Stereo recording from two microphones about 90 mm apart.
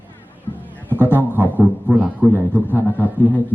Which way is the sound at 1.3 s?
20° right (ahead or behind).